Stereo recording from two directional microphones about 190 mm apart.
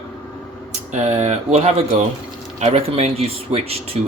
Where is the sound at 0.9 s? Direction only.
35° right (ahead or behind).